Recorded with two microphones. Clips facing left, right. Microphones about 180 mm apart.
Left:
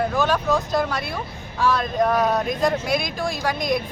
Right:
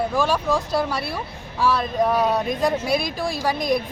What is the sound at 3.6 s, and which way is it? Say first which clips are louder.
Speech: right 1 dB; 35° right (ahead or behind).